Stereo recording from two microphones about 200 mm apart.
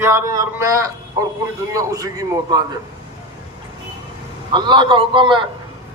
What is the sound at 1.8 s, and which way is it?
Speech, 15° right (ahead or behind).